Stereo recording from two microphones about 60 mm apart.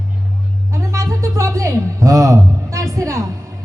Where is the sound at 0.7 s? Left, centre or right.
Right.